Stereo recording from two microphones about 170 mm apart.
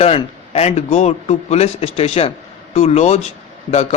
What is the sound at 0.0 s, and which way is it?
Speech, 35° left (ahead or behind).